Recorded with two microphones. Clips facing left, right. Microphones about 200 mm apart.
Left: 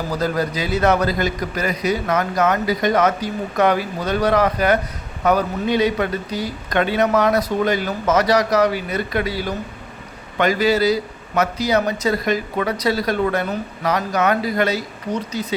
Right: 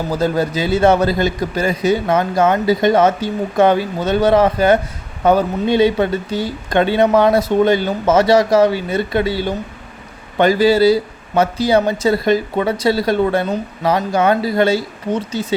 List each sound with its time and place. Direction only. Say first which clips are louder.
0.1 s speech: right 4 dB; 25° right (ahead or behind)